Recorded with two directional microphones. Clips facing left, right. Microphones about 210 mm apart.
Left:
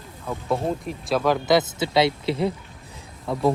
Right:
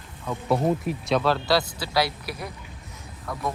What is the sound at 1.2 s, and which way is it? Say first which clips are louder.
Speech: left 6 dB; 15° left (ahead or behind).